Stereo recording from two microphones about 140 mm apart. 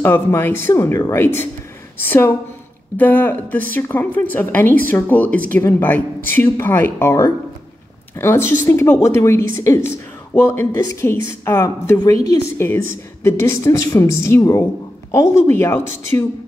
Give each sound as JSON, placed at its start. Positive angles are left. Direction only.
{"t": 0.0, "sound": "a woman's voice", "side_deg": 15}